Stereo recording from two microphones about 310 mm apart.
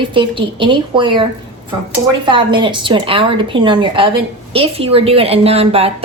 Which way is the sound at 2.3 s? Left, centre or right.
Centre.